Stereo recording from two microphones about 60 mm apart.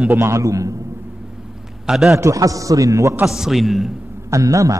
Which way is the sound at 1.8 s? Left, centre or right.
Centre.